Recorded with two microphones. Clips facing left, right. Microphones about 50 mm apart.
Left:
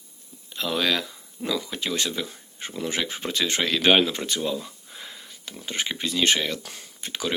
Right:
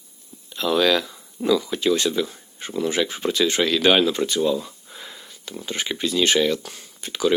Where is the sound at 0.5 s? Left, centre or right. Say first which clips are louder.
Right 6 dB; centre.